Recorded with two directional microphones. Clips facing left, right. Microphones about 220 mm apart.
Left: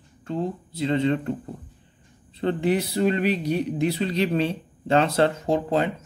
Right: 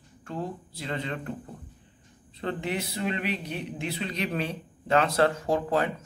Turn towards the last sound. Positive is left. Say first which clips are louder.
# left 3 dB
turn(degrees=25)  # may be behind; listen again after turning